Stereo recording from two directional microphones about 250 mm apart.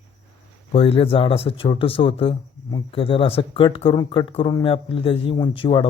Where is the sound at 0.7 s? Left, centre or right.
Left.